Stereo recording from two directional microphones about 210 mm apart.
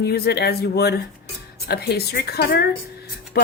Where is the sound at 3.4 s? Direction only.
45° left (ahead or behind).